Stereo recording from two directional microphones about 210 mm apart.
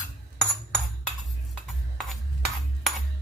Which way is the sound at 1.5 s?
Centre (ahead or behind).